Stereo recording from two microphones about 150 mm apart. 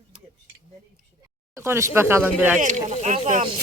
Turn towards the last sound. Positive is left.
turn(degrees=-60)  # may be behind; listen again after turning